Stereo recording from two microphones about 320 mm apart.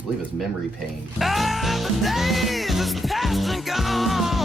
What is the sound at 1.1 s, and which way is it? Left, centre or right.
Music, centre.